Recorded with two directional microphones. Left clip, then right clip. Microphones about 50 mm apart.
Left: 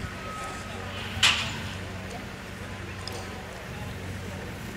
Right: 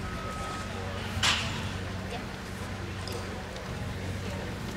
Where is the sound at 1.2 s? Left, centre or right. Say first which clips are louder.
Left 5 dB; left.